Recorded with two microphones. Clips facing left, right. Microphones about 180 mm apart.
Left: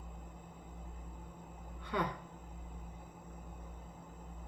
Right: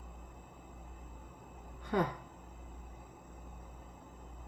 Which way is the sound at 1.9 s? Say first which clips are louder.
Right 4 dB; 45° right (ahead or behind).